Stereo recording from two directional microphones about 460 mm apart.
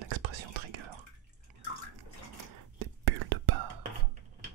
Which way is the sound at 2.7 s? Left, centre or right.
Right.